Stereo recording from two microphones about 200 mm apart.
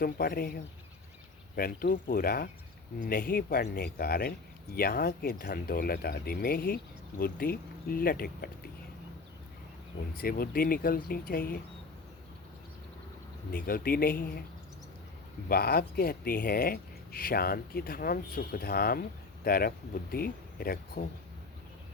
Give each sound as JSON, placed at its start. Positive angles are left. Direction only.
{"t": 0.0, "sound": "speech", "side_deg": 50}
{"t": 10.2, "sound": "speech", "side_deg": 50}
{"t": 13.7, "sound": "speech", "side_deg": 50}
{"t": 15.4, "sound": "speech", "side_deg": 50}